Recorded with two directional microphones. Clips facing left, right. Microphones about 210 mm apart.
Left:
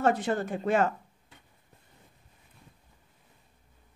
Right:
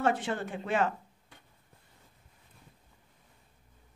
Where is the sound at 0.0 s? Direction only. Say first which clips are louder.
Left 3 dB; 40° left (ahead or behind).